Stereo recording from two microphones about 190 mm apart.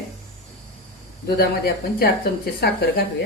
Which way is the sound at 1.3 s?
55° left (ahead or behind).